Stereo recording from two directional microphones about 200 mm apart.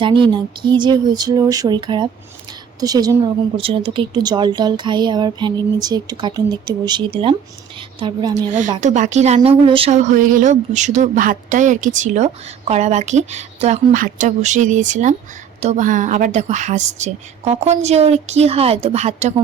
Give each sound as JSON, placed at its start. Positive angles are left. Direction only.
{"t": 0.0, "sound": "a woman's voice", "side_deg": -25}
{"t": 8.4, "sound": "speech", "side_deg": -40}